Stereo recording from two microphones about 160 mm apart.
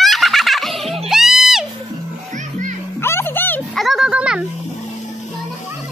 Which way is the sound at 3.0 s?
15° left (ahead or behind).